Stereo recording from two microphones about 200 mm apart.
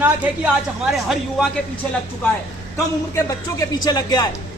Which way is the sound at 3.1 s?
15° left (ahead or behind).